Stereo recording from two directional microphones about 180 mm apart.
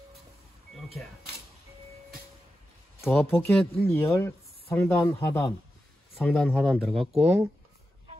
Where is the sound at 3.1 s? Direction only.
5° left (ahead or behind).